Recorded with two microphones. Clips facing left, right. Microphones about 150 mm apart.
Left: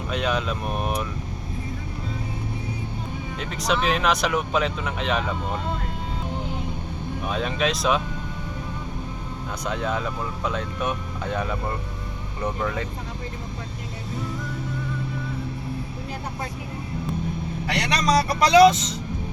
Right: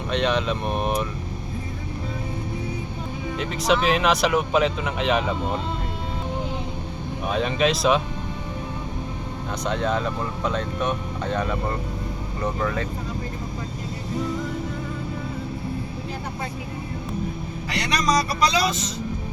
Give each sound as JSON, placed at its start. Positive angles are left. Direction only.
{"t": 0.1, "sound": "speech", "side_deg": 5}
{"t": 3.3, "sound": "speech", "side_deg": 0}
{"t": 7.3, "sound": "speech", "side_deg": 0}
{"t": 9.6, "sound": "speech", "side_deg": 5}
{"t": 17.7, "sound": "speech", "side_deg": 70}